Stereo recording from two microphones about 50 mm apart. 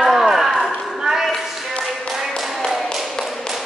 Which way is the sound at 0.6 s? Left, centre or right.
Centre.